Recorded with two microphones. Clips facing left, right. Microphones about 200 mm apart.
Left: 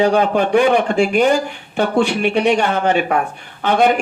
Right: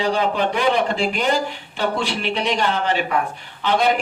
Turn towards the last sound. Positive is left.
turn(degrees=50)  # may be behind; listen again after turning